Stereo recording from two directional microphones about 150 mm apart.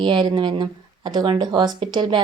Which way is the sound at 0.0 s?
30° right (ahead or behind).